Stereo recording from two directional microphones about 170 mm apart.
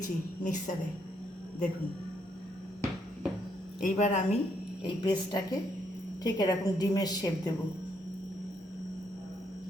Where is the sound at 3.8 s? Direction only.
45° left (ahead or behind).